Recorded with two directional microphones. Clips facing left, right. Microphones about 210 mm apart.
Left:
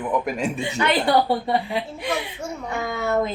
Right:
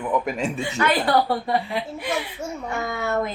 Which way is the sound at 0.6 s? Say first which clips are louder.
Left 1 dB; 20° left (ahead or behind).